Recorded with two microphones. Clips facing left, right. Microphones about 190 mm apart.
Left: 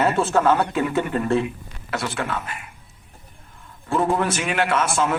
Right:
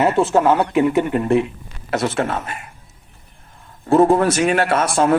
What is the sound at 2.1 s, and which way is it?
Speech, 45° right (ahead or behind).